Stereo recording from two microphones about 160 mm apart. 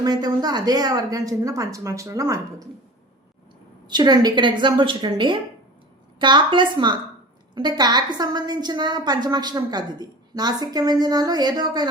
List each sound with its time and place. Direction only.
0.0 s a woman's voice: 25° right (ahead or behind)
3.8 s a woman's voice: 25° right (ahead or behind)